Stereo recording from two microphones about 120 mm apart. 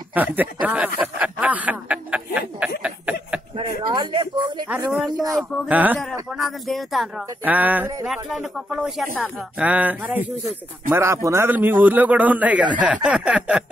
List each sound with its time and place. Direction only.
0.1 s snicker: 15° right (ahead or behind)
3.5 s speech: 40° right (ahead or behind)
5.7 s snicker: 15° right (ahead or behind)
6.3 s speech: centre (ahead or behind)
7.4 s snicker: 15° right (ahead or behind)
8.1 s speech: 5° right (ahead or behind)
9.2 s snicker: 10° right (ahead or behind)